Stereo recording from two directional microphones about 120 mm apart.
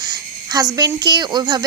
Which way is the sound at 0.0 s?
30° right (ahead or behind).